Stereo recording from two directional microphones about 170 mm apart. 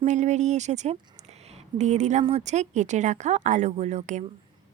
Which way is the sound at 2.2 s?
40° right (ahead or behind).